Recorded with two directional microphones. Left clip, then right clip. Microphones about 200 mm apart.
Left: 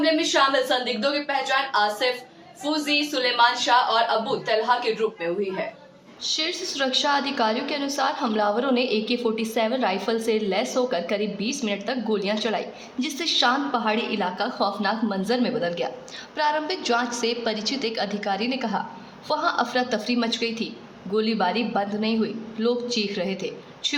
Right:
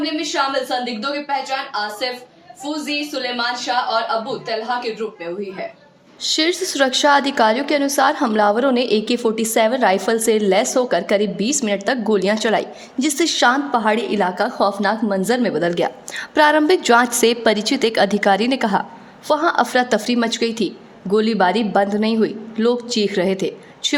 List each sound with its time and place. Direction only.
0.0 s a woman's voice: centre (ahead or behind)
6.2 s a woman's voice: 40° right (ahead or behind)